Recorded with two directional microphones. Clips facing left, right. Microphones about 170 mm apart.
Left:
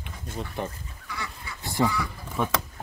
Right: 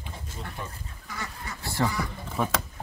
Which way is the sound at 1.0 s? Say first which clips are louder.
Even; 45° right (ahead or behind).